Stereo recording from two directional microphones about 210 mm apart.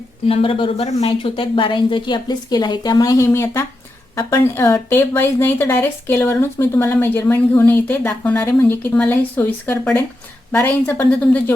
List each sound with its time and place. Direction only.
0.3 s a woman's voice: 25° left (ahead or behind); by 11.5 s 5° left (ahead or behind)